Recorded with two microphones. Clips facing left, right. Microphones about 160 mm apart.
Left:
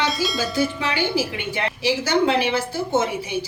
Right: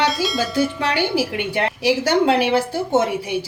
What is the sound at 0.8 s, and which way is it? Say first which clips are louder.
A woman's voice: right 3 dB; 65° right (ahead or behind).